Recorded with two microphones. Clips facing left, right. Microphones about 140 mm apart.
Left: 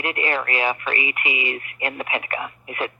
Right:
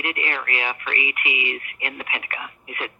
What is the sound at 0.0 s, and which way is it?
Speech, 35° left (ahead or behind).